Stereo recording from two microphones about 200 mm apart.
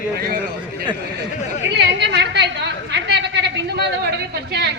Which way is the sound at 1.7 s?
60° right (ahead or behind).